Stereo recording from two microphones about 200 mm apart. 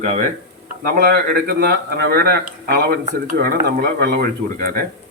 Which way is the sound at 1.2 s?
50° right (ahead or behind).